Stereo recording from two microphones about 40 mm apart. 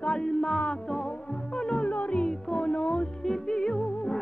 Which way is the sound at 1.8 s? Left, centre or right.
Left.